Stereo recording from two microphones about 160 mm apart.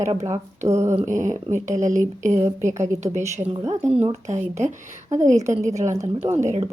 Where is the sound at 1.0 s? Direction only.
50° right (ahead or behind).